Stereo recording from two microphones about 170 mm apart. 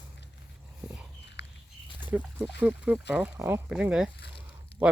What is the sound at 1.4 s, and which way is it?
Biting, 90° left.